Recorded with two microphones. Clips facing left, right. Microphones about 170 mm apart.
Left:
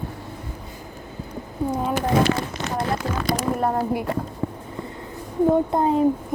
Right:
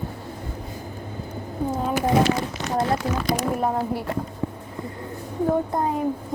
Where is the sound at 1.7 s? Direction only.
5° right (ahead or behind).